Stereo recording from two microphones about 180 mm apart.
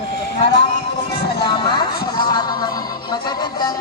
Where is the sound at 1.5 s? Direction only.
25° left (ahead or behind).